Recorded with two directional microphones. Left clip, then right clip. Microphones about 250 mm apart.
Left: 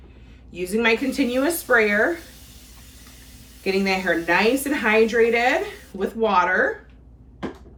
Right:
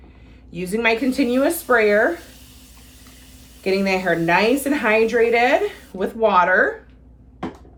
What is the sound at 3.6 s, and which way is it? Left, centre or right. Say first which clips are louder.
A woman's voice: right 2 dB; centre.